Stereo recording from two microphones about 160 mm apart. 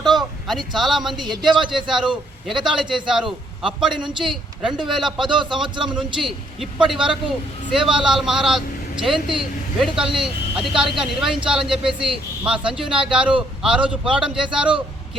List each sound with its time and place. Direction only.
0.2 s a man's voice: centre (ahead or behind)
5.3 s a man's voice: 30° right (ahead or behind)
6.2 s a man's voice: centre (ahead or behind)